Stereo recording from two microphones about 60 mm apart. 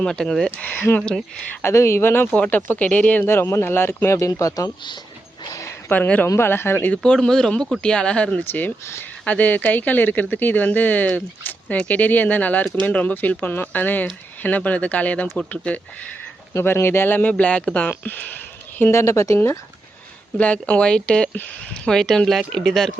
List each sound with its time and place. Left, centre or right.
0.0 s speech: centre
0.6 s speech: left
1.6 s speech: left
3.2 s speech: left
5.9 s speech: left
6.2 s speech: left
7.0 s speech: centre
8.4 s speech: left
16.6 s speech: left
18.9 s speech: left
20.4 s speech: left; by 22.9 s centre